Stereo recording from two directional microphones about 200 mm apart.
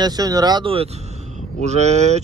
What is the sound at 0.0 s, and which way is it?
Speech, 20° right (ahead or behind).